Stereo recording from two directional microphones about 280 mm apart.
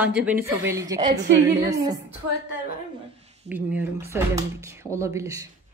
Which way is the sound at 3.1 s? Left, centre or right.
Right.